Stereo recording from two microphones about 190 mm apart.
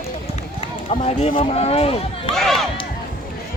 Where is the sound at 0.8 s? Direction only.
35° left (ahead or behind).